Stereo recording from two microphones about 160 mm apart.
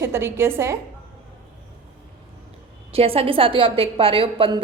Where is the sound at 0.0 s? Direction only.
15° right (ahead or behind).